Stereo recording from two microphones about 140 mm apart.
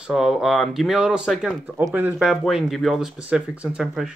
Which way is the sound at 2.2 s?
5° right (ahead or behind).